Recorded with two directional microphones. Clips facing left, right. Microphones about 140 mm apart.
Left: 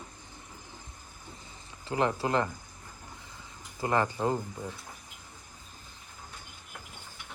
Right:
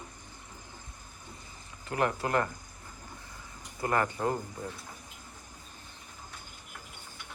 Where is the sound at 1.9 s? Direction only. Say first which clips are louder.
Left 1 dB; 25° left (ahead or behind).